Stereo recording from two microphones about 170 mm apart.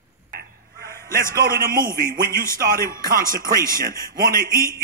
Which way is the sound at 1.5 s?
55° right (ahead or behind).